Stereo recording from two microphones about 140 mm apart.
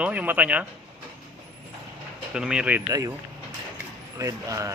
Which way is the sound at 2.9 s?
25° right (ahead or behind).